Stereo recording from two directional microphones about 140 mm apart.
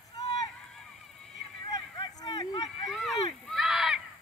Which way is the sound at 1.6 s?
30° left (ahead or behind).